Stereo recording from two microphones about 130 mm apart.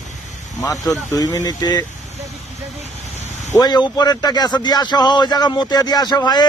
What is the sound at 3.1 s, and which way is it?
Vehicle, 65° left (ahead or behind).